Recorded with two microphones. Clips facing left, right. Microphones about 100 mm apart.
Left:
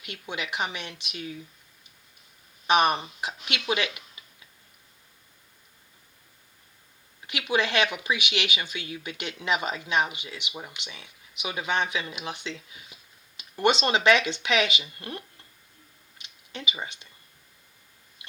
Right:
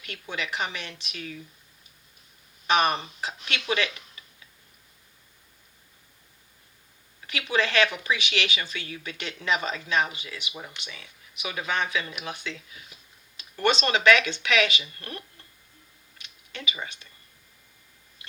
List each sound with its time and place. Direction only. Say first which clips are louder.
0.0 s speech: right 1 dB; 20° left (ahead or behind)
2.6 s speech: left 1 dB; 20° left (ahead or behind)
7.3 s speech: even; 20° left (ahead or behind)
16.1 s a sound: left 1 dB; 20° left (ahead or behind)